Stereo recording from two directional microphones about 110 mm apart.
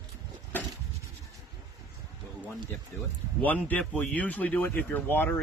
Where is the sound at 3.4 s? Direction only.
15° left (ahead or behind).